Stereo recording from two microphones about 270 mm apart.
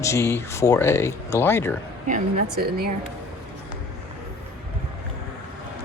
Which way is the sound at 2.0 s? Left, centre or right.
Right.